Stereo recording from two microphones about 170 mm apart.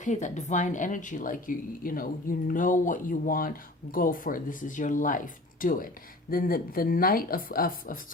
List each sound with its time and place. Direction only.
0.0 s speech: 45° left (ahead or behind)